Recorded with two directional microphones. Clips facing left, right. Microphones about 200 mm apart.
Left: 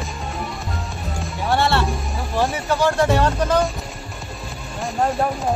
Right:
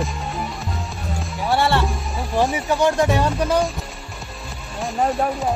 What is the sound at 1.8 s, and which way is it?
Speech, centre (ahead or behind).